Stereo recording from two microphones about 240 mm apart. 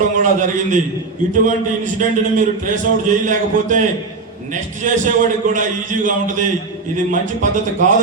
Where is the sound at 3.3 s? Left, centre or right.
Right.